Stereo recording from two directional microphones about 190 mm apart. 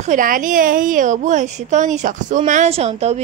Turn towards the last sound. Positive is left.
turn(degrees=-35)  # may be behind; listen again after turning